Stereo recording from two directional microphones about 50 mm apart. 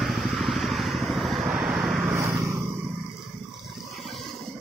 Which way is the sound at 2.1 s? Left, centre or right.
Right.